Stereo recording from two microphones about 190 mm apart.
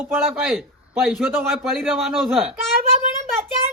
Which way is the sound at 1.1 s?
Centre (ahead or behind).